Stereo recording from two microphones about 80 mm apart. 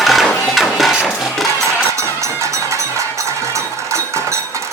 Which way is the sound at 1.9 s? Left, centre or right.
Right.